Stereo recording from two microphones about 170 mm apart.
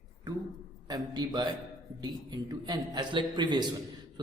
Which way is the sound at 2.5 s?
25° right (ahead or behind).